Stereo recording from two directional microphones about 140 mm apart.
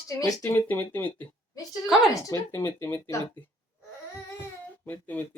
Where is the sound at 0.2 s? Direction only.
20° left (ahead or behind).